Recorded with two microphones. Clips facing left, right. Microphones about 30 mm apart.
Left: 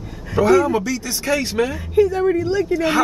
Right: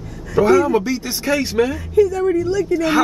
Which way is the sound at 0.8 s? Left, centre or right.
Right.